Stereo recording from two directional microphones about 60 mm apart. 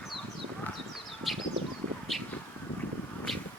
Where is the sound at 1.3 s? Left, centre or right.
Centre.